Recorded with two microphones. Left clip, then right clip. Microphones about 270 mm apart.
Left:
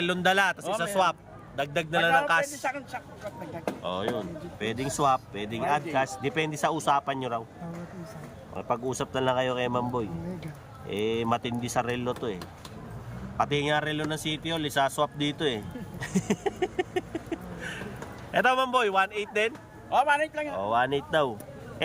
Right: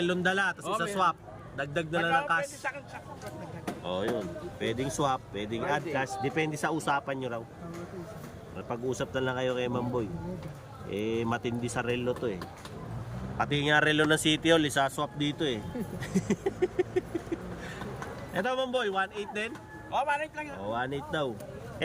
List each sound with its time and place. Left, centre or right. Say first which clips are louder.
0.0 s a man's voice: left 4 dB; centre
2.6 s a man's voice: left 5 dB; left
3.8 s speech: even; centre
8.5 s speech: left 4 dB; centre
13.4 s speech: right 1 dB; centre
18.3 s a man's voice: left 6 dB; centre
19.9 s a man's voice: left 6 dB; left
20.7 s a man's voice: left 7 dB; centre